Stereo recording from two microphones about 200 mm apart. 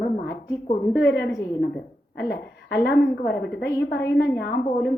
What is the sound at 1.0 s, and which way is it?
A woman's voice, 60° left (ahead or behind).